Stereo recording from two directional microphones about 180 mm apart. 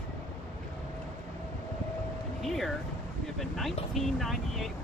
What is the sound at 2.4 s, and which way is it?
Speech, centre (ahead or behind).